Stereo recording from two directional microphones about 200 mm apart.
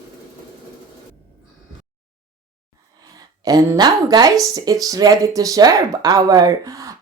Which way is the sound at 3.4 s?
20° right (ahead or behind).